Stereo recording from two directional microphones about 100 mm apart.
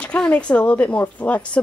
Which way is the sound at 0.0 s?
10° left (ahead or behind).